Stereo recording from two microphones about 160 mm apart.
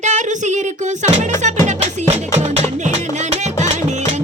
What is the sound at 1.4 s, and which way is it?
Music, 50° right (ahead or behind).